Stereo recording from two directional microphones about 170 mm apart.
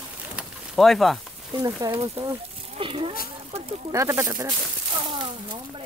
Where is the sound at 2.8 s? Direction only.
30° right (ahead or behind).